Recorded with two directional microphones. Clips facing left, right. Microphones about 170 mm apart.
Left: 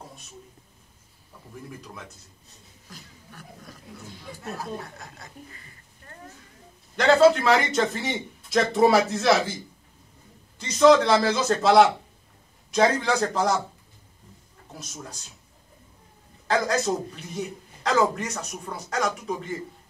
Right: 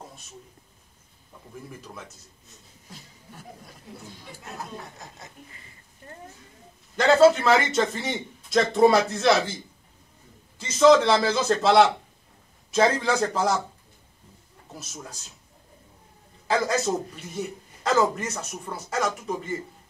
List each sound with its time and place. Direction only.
2.9 s a sound: 25° right (ahead or behind)
4.6 s speech: 20° right (ahead or behind)
7.0 s a man's voice: centre (ahead or behind)
10.6 s a man's voice: centre (ahead or behind)
16.4 s a man's voice: centre (ahead or behind)